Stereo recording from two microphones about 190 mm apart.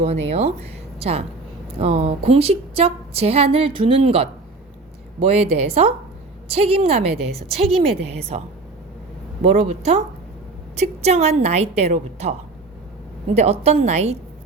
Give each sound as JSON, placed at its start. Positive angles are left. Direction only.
{"t": 0.0, "sound": "a woman's voice", "side_deg": -35}